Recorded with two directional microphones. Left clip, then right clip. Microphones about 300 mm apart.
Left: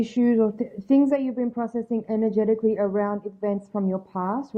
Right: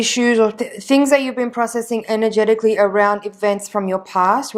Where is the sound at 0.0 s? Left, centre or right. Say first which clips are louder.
Right 7 dB; centre.